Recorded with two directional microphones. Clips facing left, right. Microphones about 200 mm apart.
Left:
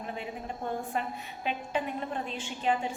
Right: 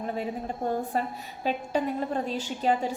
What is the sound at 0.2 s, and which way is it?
A woman's voice, 35° right (ahead or behind).